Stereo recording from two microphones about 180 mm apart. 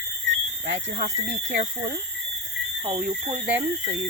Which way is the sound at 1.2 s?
70° right (ahead or behind).